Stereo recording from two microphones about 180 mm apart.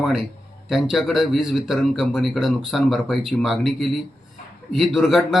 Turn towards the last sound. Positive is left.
turn(degrees=0)  # may be behind; listen again after turning